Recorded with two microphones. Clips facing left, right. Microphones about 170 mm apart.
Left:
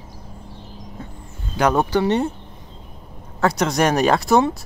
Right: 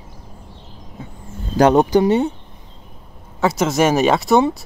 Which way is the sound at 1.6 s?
30° right (ahead or behind).